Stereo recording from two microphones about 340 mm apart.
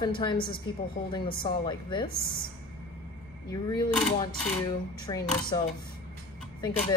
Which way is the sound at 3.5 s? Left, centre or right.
Centre.